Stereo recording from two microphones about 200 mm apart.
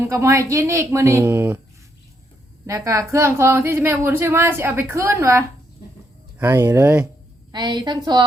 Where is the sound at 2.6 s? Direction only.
15° right (ahead or behind).